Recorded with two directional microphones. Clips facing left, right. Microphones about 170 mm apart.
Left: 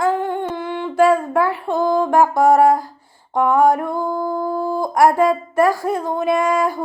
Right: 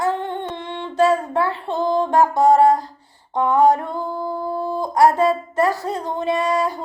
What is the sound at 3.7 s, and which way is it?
Child singing, 10° left (ahead or behind).